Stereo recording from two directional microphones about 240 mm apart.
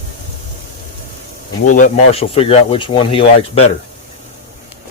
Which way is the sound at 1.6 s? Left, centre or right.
Left.